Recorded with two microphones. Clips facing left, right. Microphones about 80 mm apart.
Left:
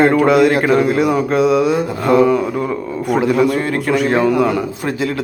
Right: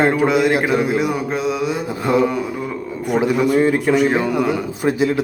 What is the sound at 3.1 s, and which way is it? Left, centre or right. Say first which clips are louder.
A man's voice: left 1 dB; centre.